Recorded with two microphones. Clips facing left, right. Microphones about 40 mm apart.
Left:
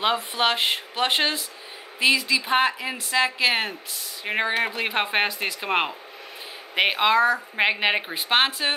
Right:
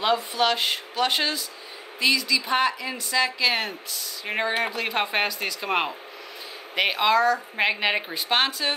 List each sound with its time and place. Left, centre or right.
0.0 s a woman's voice: left